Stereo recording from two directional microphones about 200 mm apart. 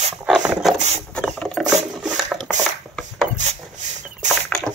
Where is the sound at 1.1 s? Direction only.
5° left (ahead or behind).